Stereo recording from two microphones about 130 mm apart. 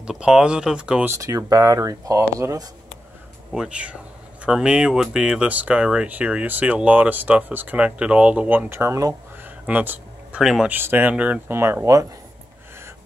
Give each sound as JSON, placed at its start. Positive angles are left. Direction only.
{"t": 0.0, "sound": "speech", "side_deg": -5}
{"t": 1.1, "sound": "speech", "side_deg": -25}
{"t": 3.5, "sound": "speech", "side_deg": -10}
{"t": 9.4, "sound": "a sound", "side_deg": -15}
{"t": 10.7, "sound": "speech", "side_deg": -15}